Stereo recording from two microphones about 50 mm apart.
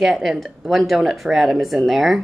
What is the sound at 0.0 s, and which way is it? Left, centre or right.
Speech, centre.